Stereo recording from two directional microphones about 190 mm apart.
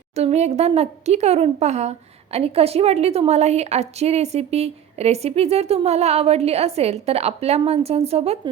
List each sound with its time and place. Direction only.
0.1 s speech: 35° right (ahead or behind)